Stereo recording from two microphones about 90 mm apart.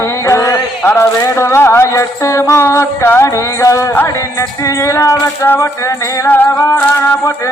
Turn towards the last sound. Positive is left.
turn(degrees=20)  # may be behind; listen again after turning